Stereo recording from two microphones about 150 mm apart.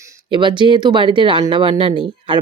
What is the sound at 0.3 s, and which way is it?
Speech, 30° right (ahead or behind).